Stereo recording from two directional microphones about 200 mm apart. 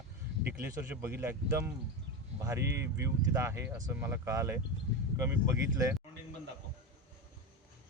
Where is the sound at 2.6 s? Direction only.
55° right (ahead or behind).